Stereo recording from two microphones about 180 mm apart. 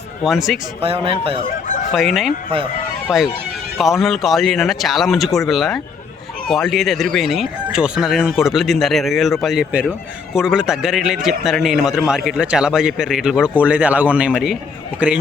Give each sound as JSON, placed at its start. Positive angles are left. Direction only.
{"t": 0.3, "sound": "a man's voice", "side_deg": 0}
{"t": 0.8, "sound": "speech", "side_deg": -30}
{"t": 1.5, "sound": "chicken", "side_deg": 50}
{"t": 1.9, "sound": "a man's voice", "side_deg": 0}
{"t": 3.8, "sound": "a man's voice", "side_deg": 0}